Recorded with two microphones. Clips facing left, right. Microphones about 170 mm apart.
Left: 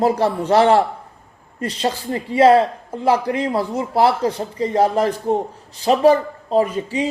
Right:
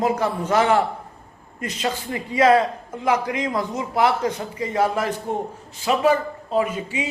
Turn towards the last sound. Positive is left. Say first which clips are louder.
# left 4 dB
turn(degrees=35)  # may be behind; listen again after turning